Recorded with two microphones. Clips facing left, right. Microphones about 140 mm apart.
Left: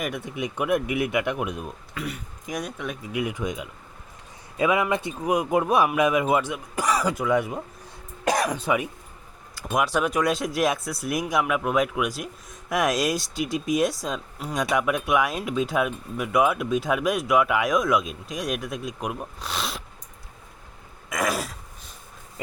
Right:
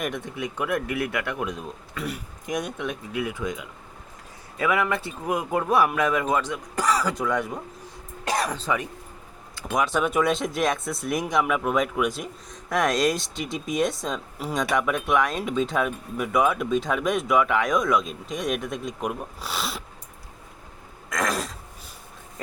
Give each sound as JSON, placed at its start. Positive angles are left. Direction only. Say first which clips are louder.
{"t": 0.0, "sound": "speech", "louder": "even", "side_deg": 5}
{"t": 2.0, "sound": "speech", "louder": "right 1 dB", "side_deg": 0}
{"t": 3.1, "sound": "speech", "louder": "left 4 dB", "side_deg": 15}
{"t": 21.1, "sound": "speech", "louder": "left 1 dB", "side_deg": 10}